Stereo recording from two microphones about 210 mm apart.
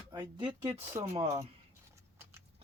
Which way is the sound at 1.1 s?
30° right (ahead or behind).